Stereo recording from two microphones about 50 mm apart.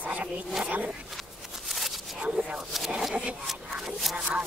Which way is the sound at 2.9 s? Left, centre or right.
Centre.